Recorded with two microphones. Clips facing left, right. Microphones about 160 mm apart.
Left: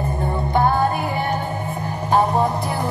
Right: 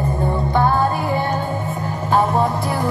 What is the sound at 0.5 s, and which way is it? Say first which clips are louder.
Music: even; 15° left (ahead or behind).